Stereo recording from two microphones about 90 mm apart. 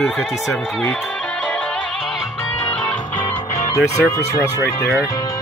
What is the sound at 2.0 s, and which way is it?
Music, centre (ahead or behind).